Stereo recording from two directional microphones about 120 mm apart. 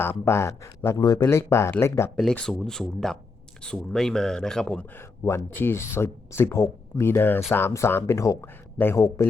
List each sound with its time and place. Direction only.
0.0 s speech: 20° left (ahead or behind)
2.1 s speech: 5° left (ahead or behind)
4.9 s speech: 20° left (ahead or behind)